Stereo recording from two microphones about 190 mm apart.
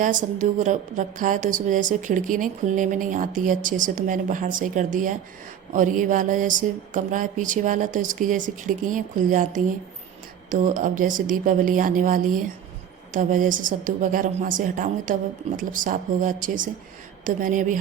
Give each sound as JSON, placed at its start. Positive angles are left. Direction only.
{"t": 0.0, "sound": "a woman's voice", "side_deg": -40}